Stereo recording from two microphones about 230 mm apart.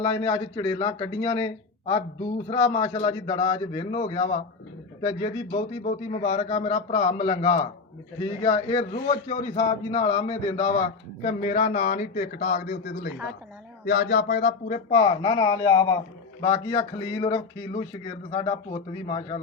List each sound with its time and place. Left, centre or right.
0.0 s a man's voice: left